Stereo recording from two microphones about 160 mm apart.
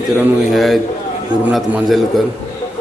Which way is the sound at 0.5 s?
Centre (ahead or behind).